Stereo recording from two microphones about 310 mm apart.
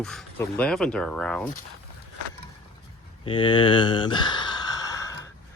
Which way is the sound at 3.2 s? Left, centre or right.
Centre.